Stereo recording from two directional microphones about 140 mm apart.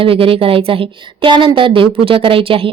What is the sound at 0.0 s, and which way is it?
A woman's voice, 40° right (ahead or behind).